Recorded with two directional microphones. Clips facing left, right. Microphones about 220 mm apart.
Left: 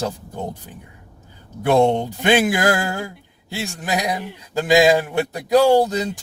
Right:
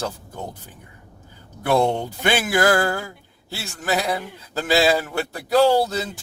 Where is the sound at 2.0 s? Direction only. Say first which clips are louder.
Left 5 dB; 15° left (ahead or behind).